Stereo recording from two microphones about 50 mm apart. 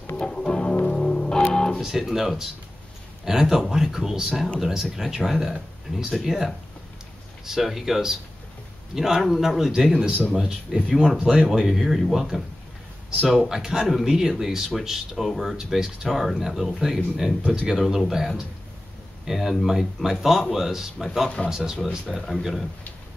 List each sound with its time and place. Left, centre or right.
0.1 s music: centre
1.8 s speech: centre
10.9 s speech: centre